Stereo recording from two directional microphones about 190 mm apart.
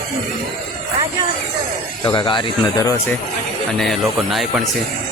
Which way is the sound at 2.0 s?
25° left (ahead or behind).